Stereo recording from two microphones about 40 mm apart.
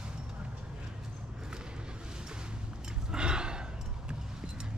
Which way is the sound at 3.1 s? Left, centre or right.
Right.